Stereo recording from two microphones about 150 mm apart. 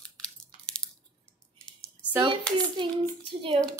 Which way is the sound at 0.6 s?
5° left (ahead or behind).